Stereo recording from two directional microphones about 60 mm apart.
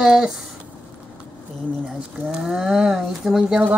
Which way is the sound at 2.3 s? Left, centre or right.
Centre.